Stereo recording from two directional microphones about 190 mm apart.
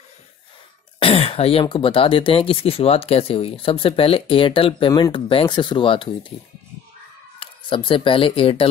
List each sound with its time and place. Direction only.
0.9 s speech: 30° left (ahead or behind)
7.3 s speech: 25° left (ahead or behind)